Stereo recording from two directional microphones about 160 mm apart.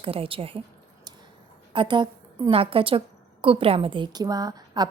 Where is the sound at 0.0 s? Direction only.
35° right (ahead or behind).